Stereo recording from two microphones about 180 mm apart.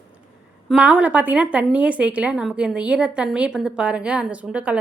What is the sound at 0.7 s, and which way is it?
A woman's voice, 5° right (ahead or behind).